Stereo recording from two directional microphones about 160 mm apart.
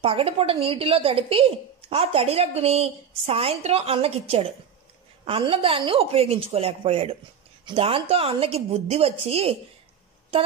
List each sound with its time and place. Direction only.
0.0 s a woman's voice: 35° right (ahead or behind)